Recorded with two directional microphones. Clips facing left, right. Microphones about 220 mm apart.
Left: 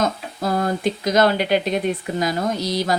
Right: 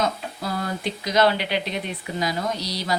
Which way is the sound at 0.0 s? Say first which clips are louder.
Left 4 dB; 45° left (ahead or behind).